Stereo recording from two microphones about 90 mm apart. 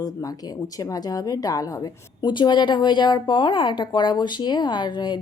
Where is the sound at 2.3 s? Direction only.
55° left (ahead or behind).